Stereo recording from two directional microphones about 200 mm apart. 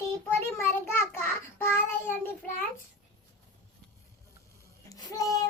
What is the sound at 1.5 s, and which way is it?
Child singing, 10° left (ahead or behind).